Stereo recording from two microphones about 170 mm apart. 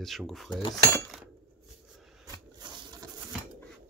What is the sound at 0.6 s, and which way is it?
Speech, 30° left (ahead or behind).